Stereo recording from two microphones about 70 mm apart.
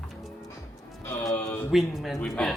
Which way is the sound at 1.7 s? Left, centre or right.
Centre.